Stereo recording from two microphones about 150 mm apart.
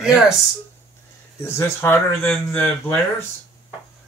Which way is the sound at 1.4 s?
15° left (ahead or behind).